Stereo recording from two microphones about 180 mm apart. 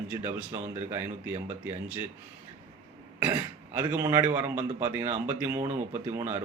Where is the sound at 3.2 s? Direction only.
10° right (ahead or behind).